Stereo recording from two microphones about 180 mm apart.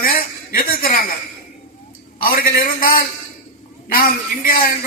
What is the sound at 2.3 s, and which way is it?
Speech, 55° left (ahead or behind).